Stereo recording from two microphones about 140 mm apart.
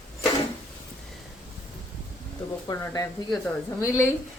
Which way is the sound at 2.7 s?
25° left (ahead or behind).